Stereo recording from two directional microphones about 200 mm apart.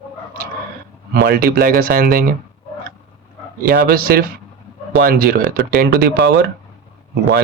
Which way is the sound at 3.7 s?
50° right (ahead or behind).